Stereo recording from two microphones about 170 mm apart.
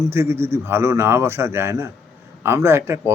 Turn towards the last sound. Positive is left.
turn(degrees=-15)  # may be behind; listen again after turning